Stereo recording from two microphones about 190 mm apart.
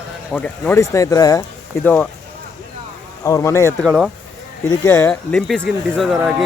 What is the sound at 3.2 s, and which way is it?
Speech, 15° left (ahead or behind).